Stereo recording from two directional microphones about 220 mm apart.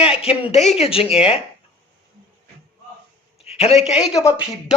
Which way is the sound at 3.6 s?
30° left (ahead or behind).